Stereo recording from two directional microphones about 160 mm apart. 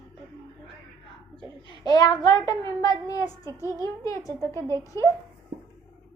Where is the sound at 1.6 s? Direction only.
25° left (ahead or behind).